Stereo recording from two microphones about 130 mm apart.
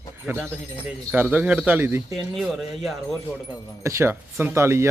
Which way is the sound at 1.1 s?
10° right (ahead or behind).